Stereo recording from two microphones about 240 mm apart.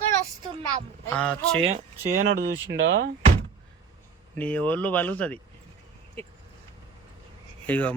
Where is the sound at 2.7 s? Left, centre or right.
Right.